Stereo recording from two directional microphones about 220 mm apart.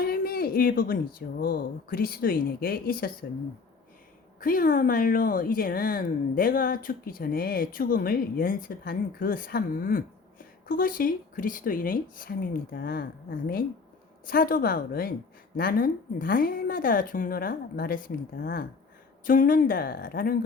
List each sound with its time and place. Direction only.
0.0 s a sound: 40° left (ahead or behind)
1.4 s speech: 45° left (ahead or behind)
4.4 s speech: 40° left (ahead or behind)
14.3 s speech: 40° left (ahead or behind)